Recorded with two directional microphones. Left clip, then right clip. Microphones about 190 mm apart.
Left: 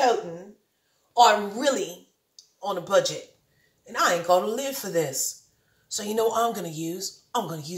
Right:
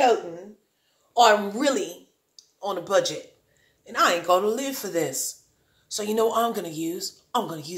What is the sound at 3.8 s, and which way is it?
A woman's voice, 15° right (ahead or behind).